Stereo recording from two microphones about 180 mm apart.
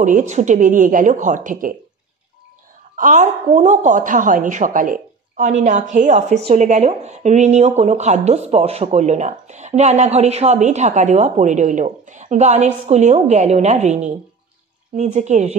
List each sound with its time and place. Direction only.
0.0 s a woman's voice: 45° right (ahead or behind)
3.0 s a woman's voice: 45° right (ahead or behind)